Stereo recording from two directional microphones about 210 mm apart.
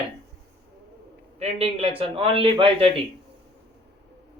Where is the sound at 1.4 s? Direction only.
30° right (ahead or behind).